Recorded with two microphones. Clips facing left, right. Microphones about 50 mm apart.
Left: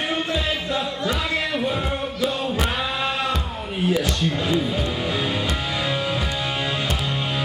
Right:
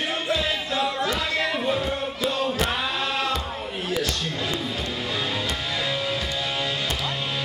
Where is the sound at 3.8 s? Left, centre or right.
Centre.